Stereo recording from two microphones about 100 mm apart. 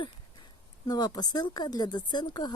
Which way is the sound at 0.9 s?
40° left (ahead or behind).